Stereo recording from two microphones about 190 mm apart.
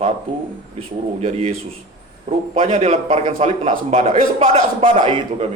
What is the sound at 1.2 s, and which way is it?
Speech, 35° right (ahead or behind).